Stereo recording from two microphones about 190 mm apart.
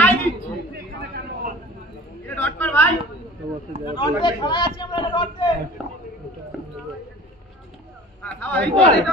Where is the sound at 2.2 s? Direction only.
10° left (ahead or behind).